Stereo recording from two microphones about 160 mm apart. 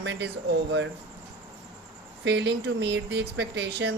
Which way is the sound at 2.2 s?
90° right.